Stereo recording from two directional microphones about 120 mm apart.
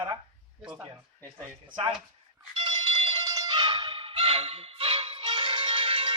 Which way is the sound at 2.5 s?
40° right (ahead or behind).